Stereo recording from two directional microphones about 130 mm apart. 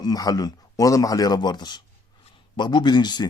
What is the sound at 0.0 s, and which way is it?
Speech, 30° left (ahead or behind).